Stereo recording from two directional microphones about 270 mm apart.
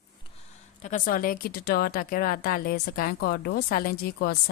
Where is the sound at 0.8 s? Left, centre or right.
Left.